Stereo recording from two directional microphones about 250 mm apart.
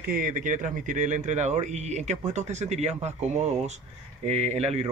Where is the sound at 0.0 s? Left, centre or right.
Right.